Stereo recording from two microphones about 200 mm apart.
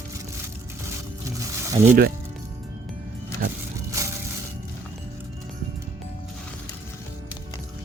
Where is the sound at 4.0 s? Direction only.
15° right (ahead or behind).